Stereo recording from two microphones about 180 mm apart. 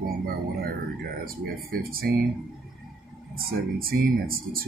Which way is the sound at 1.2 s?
55° right (ahead or behind).